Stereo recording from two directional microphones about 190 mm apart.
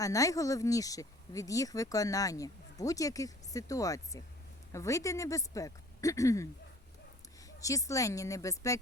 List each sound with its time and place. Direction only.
0.0 s speech: 15° left (ahead or behind)